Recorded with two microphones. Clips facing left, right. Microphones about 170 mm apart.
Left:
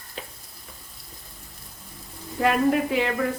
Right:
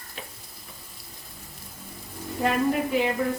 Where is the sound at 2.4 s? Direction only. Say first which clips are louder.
Left 3 dB; 75° left (ahead or behind).